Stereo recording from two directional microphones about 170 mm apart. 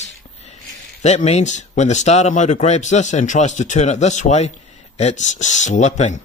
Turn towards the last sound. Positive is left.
turn(degrees=40)  # may be behind; listen again after turning